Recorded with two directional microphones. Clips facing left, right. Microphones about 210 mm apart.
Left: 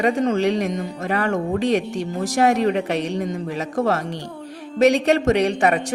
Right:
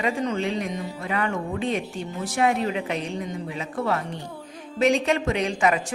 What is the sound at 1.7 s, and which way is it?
Speech, 75° left (ahead or behind).